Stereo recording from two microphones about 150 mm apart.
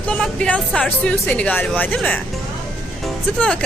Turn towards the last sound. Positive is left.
turn(degrees=5)  # may be behind; listen again after turning